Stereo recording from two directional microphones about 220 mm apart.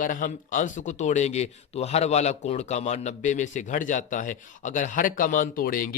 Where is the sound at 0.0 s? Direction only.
35° left (ahead or behind).